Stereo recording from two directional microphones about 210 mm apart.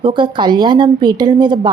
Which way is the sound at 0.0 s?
25° right (ahead or behind).